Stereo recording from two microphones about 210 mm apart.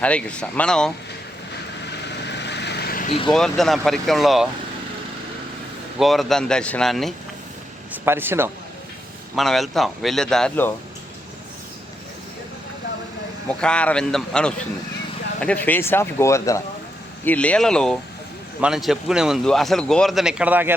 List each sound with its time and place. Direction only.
0.0 s speech: 5° left (ahead or behind)
2.2 s vehicle: 55° left (ahead or behind)
3.1 s speech: 25° left (ahead or behind)
3.3 s speech: centre (ahead or behind)
6.0 s speech: centre (ahead or behind)
8.0 s a man's voice: 10° right (ahead or behind)
9.3 s speech: centre (ahead or behind)
13.5 s speech: 5° left (ahead or behind)